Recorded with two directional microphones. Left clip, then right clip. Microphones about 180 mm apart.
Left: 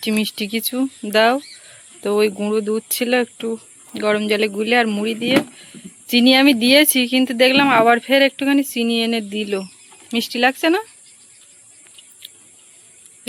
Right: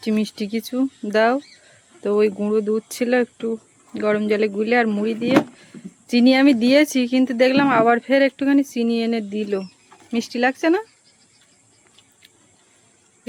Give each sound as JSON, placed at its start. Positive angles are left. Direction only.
{"t": 0.0, "sound": "speech", "side_deg": -5}